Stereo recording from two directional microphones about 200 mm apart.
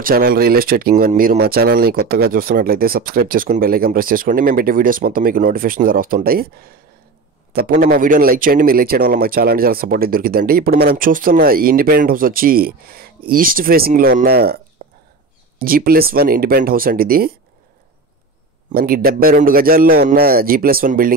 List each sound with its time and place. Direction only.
0.0 s a man's voice: 45° right (ahead or behind)
14.8 s whispering: 50° right (ahead or behind)
15.6 s a man's voice: 45° right (ahead or behind)
18.7 s a man's voice: 50° right (ahead or behind)